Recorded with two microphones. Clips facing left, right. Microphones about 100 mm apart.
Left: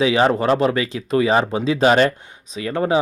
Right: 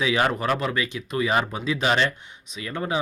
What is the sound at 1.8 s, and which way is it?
Speech, 40° left (ahead or behind).